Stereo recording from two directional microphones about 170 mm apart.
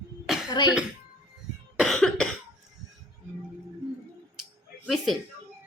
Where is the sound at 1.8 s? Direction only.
Centre (ahead or behind).